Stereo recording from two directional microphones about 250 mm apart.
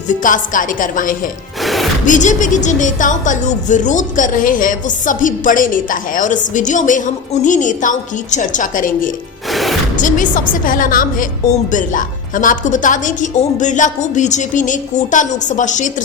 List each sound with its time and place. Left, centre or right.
0.1 s a woman's voice: left
1.6 s music: centre
2.0 s a woman's voice: left
9.5 s music: centre
9.9 s a woman's voice: left